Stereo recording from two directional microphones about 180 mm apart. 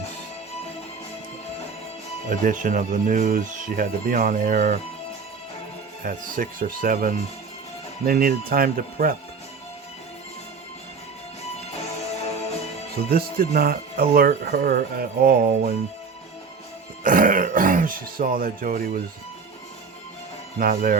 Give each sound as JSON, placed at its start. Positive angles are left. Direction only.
{"t": 2.3, "sound": "speech", "side_deg": -45}
{"t": 6.0, "sound": "speech", "side_deg": -50}
{"t": 11.5, "sound": "music", "side_deg": 35}
{"t": 13.1, "sound": "speech", "side_deg": -55}
{"t": 17.0, "sound": "throat clearing", "side_deg": -50}
{"t": 20.6, "sound": "speech", "side_deg": -50}